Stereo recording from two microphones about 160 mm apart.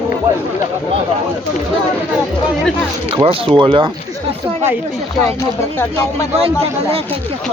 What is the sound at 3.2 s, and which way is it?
Speech, 35° right (ahead or behind).